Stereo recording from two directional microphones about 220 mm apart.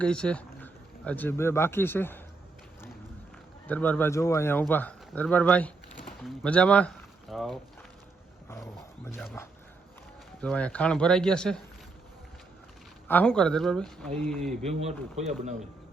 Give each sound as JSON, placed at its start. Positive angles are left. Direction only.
{"t": 0.0, "sound": "speech", "side_deg": 5}
{"t": 3.7, "sound": "speech", "side_deg": 5}
{"t": 8.4, "sound": "roaring cats", "side_deg": 15}
{"t": 9.1, "sound": "speech", "side_deg": 10}
{"t": 13.1, "sound": "speech", "side_deg": 5}
{"t": 14.6, "sound": "speech", "side_deg": -30}